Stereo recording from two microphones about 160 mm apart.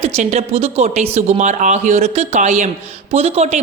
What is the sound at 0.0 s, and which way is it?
A woman's voice, 45° right (ahead or behind).